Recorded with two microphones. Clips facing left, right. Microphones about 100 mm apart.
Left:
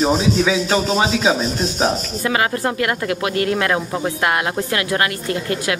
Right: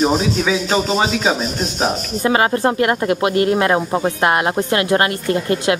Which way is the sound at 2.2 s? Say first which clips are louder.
Right 4 dB; 30° right (ahead or behind).